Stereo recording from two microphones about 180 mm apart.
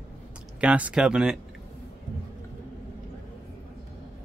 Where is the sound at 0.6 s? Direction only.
5° right (ahead or behind).